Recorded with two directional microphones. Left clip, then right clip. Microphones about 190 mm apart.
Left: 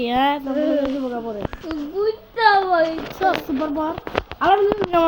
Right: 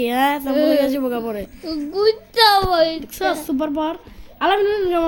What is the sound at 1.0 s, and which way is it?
A woman's voice, 30° right (ahead or behind).